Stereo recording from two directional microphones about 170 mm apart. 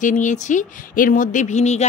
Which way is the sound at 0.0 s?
45° left (ahead or behind).